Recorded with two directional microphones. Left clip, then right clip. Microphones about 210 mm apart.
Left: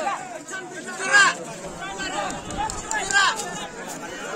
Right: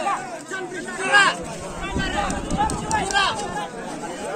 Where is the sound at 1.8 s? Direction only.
60° left (ahead or behind).